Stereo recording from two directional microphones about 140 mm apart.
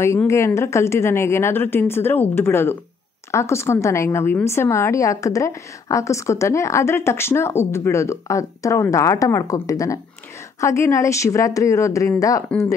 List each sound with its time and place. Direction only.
0.3 s a woman's voice: 20° left (ahead or behind)